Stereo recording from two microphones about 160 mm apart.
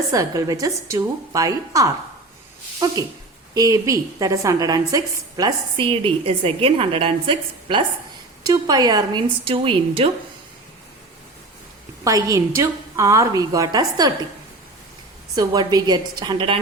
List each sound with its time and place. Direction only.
0.1 s a woman's voice: 20° right (ahead or behind)
12.0 s a woman's voice: 20° right (ahead or behind)
15.4 s a woman's voice: 25° right (ahead or behind)